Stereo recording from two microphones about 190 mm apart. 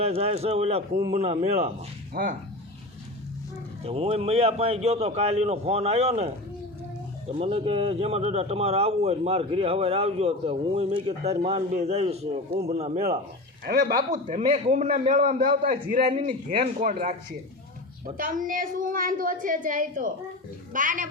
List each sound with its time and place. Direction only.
0.0 s speech: 35° right (ahead or behind)
2.2 s speech: 55° right (ahead or behind)
3.8 s speech: 30° right (ahead or behind)
7.3 s speech: 30° right (ahead or behind)
13.7 s speech: 50° right (ahead or behind)
16.0 s speech: 30° right (ahead or behind)
18.0 s speech: 45° right (ahead or behind)